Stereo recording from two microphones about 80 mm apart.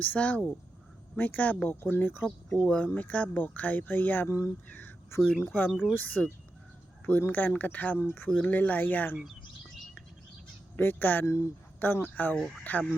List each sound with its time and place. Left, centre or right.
0.0 s speech: centre
2.5 s speech: centre
4.7 s a sound: left
5.9 s speech: left
10.8 s speech: left